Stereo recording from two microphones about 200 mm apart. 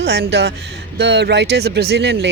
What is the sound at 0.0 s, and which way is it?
Speech, 55° right (ahead or behind).